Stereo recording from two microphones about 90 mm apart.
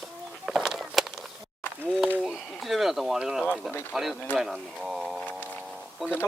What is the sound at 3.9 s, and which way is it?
Speech, 5° right (ahead or behind).